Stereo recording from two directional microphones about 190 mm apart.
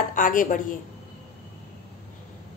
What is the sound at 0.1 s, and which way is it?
Speech, 45° left (ahead or behind).